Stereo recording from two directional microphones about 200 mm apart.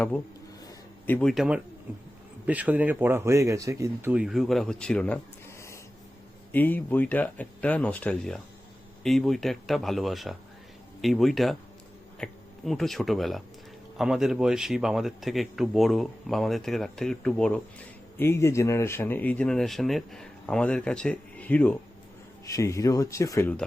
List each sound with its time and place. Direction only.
1.0 s a man's voice: 5° left (ahead or behind)